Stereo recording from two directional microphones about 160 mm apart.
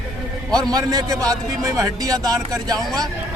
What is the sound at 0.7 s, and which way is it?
A man's voice, 20° right (ahead or behind).